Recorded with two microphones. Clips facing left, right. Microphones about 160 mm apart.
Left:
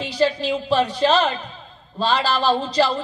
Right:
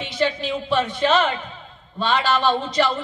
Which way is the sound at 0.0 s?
35° left (ahead or behind).